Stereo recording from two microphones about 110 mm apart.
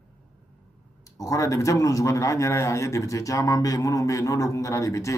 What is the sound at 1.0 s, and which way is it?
Speech, 30° left (ahead or behind).